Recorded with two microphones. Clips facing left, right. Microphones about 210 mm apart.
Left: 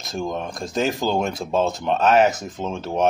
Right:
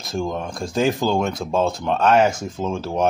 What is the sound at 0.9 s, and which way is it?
Speech, 20° left (ahead or behind).